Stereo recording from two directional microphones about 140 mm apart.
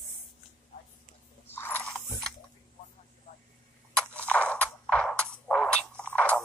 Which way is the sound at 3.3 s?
70° left (ahead or behind).